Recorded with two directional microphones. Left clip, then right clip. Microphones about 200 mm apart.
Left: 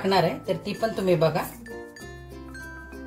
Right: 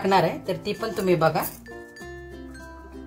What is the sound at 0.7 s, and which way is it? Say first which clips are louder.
Speech: even; 35° right (ahead or behind).